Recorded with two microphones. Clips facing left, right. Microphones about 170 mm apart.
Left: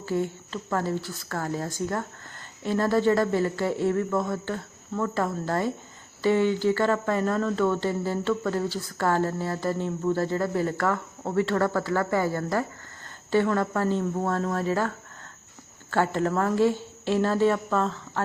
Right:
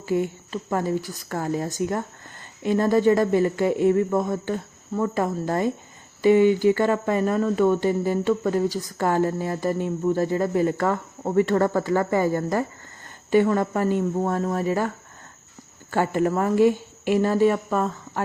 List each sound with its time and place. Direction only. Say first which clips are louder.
0.0 s speech: right 3 dB; 15° right (ahead or behind)